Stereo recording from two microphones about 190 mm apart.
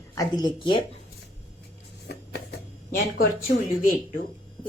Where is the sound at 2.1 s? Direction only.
60° left (ahead or behind).